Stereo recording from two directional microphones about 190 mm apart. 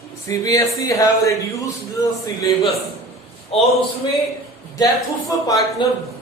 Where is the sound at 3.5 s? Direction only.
30° left (ahead or behind).